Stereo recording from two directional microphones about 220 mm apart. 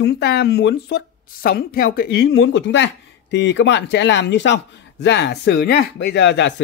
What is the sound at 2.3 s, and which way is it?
Speech, 55° left (ahead or behind).